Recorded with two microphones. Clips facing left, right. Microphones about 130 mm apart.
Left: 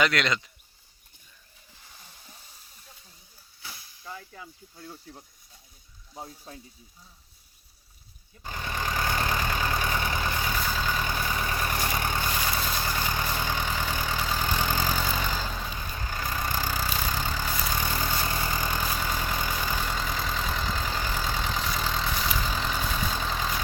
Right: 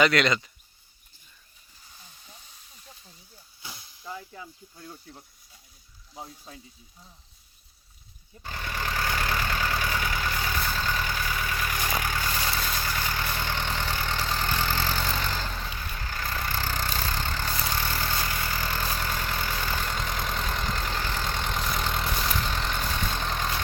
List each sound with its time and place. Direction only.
0.0 s speech: centre (ahead or behind)
3.6 s snake: 15° right (ahead or behind)
6.1 s speech: 5° left (ahead or behind)
8.4 s vehicle: 20° left (ahead or behind)
10.6 s vehicle: 10° left (ahead or behind)